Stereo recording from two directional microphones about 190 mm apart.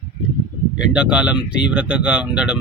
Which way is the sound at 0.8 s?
5° right (ahead or behind).